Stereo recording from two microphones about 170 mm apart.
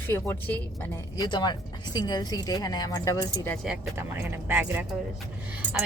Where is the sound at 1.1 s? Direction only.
25° left (ahead or behind).